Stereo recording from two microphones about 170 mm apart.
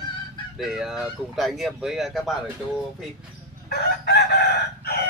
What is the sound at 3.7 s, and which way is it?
Chicken, 70° left (ahead or behind).